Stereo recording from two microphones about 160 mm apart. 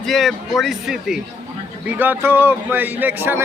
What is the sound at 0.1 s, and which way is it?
A man's voice, centre (ahead or behind).